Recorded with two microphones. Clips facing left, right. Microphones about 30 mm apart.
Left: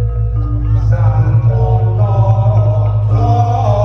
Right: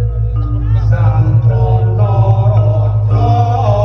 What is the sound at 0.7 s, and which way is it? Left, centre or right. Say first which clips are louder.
Music: right 1 dB; right.